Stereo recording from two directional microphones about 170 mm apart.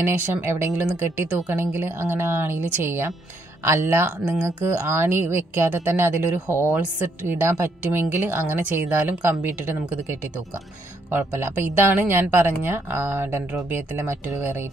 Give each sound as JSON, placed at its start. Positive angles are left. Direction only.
{"t": 0.0, "sound": "speech", "side_deg": -15}